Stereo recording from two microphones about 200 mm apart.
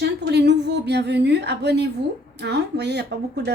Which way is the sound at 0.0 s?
55° right (ahead or behind).